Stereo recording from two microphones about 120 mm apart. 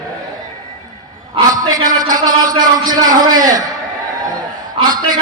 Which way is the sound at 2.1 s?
30° right (ahead or behind).